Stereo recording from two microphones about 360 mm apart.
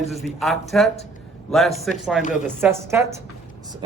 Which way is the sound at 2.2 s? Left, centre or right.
Left.